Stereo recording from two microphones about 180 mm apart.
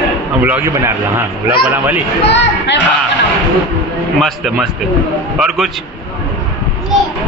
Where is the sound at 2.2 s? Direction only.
75° left (ahead or behind).